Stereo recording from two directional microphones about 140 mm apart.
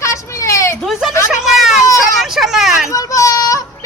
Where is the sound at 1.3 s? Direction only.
5° right (ahead or behind).